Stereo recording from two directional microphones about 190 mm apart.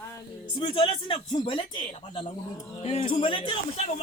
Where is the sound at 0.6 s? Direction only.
25° left (ahead or behind).